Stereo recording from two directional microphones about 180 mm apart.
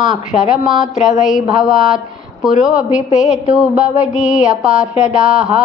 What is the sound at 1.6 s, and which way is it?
A woman's voice, centre (ahead or behind).